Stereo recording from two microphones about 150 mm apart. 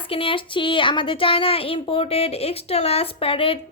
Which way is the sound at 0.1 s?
35° left (ahead or behind).